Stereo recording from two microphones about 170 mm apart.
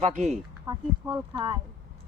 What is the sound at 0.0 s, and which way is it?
Speech, 45° right (ahead or behind).